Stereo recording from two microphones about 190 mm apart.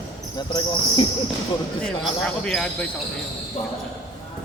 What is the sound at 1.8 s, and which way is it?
Speech, 5° left (ahead or behind).